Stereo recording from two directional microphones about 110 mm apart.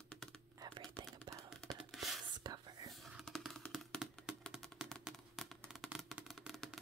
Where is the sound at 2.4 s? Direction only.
35° right (ahead or behind).